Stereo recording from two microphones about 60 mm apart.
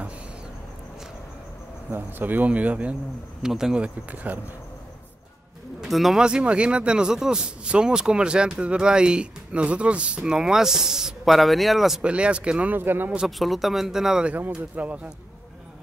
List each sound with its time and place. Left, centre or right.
1.9 s speech: right
3.4 s a man's voice: centre; by 4.4 s right
5.8 s speech: centre
6.2 s a man's voice: centre
12.0 s speech: centre
12.7 s speech: right
13.4 s speech: centre
14.5 s speech: right